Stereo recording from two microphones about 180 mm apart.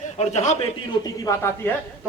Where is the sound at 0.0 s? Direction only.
40° left (ahead or behind).